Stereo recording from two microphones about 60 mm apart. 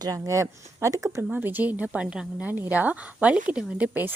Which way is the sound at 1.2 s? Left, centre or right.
Right.